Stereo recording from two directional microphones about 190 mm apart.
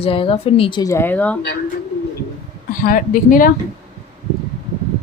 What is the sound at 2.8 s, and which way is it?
Speech, 45° left (ahead or behind).